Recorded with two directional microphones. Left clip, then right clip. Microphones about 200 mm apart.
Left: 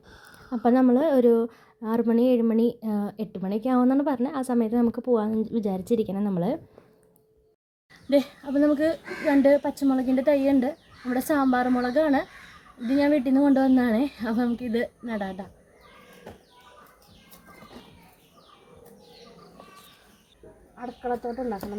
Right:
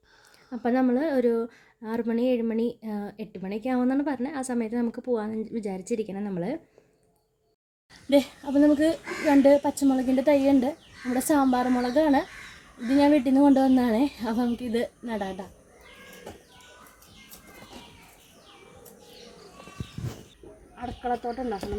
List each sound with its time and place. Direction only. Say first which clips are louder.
0.5 s a woman's voice: left 4 dB; 5° left (ahead or behind)
8.1 s a woman's voice: right 1 dB; centre (ahead or behind)
20.7 s a woman's voice: even; centre (ahead or behind)